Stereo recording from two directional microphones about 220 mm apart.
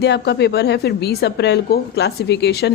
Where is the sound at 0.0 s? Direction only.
50° left (ahead or behind).